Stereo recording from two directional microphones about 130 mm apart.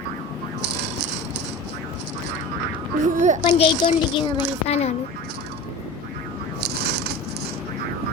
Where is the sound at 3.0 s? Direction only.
70° right (ahead or behind).